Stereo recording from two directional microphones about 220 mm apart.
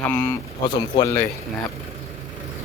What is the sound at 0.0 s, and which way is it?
Speech, 10° left (ahead or behind).